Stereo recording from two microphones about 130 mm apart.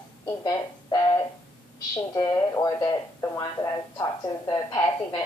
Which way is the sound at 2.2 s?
30° left (ahead or behind).